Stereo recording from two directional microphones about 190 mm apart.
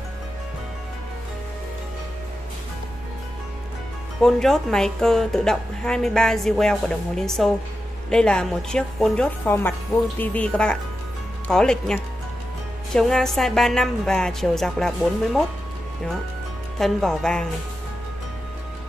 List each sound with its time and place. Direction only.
4.2 s a woman's voice: centre (ahead or behind)
16.7 s a woman's voice: 5° left (ahead or behind)